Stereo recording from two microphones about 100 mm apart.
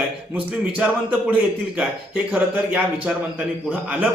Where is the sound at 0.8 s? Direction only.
15° right (ahead or behind).